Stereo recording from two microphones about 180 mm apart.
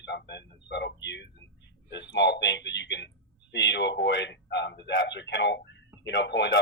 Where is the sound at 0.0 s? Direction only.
70° left (ahead or behind).